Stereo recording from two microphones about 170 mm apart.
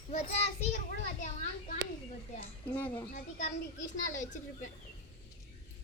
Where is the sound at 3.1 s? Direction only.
45° left (ahead or behind).